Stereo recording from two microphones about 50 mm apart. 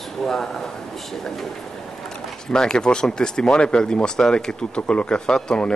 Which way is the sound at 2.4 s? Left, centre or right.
Centre.